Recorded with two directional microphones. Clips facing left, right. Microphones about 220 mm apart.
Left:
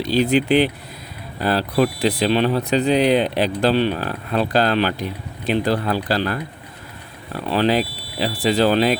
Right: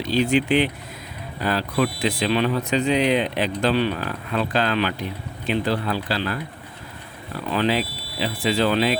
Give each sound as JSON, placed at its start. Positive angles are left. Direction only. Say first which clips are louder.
{"t": 0.0, "sound": "speech", "louder": "left 2 dB", "side_deg": 35}